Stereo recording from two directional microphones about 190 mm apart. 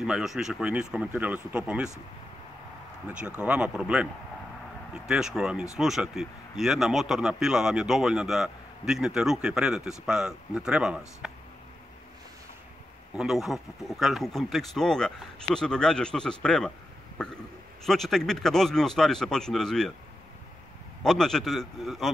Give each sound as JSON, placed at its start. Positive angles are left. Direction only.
{"t": 0.0, "sound": "speech", "side_deg": 0}
{"t": 3.3, "sound": "speech", "side_deg": -5}
{"t": 13.1, "sound": "speech", "side_deg": -5}
{"t": 21.0, "sound": "speech", "side_deg": 0}